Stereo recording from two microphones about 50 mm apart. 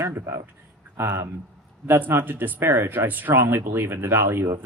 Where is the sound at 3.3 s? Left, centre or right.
Right.